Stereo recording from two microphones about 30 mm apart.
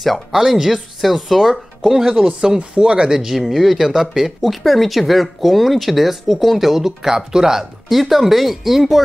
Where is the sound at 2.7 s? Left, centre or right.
Right.